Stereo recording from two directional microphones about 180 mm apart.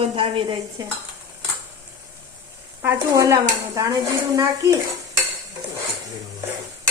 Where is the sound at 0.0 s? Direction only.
30° right (ahead or behind).